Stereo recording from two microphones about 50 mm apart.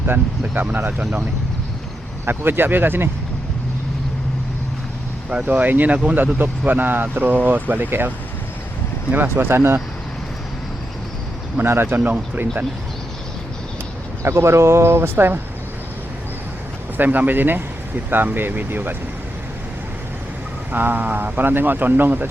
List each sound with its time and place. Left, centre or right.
0.5 s speech: right
2.2 s speech: right
5.5 s speech: right
9.1 s speech: right
11.6 s speech: right
14.2 s speech: right
17.0 s speech: right
20.7 s speech: right